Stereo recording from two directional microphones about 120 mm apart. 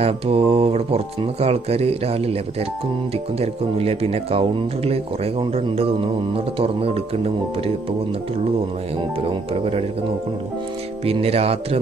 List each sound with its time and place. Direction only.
0.0 s speech: 55° right (ahead or behind)
3.3 s speech: 55° right (ahead or behind)
9.5 s speech: 55° right (ahead or behind)
11.1 s speech: 55° right (ahead or behind)